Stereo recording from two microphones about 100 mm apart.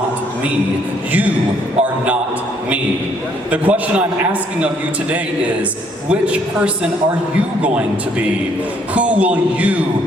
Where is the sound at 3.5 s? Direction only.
15° right (ahead or behind).